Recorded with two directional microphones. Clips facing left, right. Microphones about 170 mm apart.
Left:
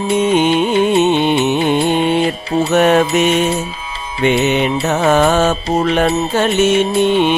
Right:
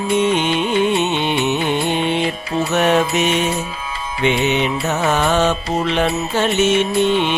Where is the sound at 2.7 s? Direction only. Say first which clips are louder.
Left 4 dB; 50° left (ahead or behind).